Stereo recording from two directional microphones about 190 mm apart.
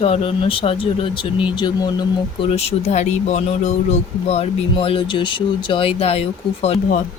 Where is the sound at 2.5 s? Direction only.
35° left (ahead or behind).